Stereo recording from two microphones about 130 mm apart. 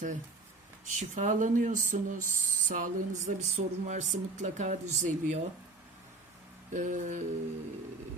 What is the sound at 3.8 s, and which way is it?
A woman's voice, 70° right (ahead or behind).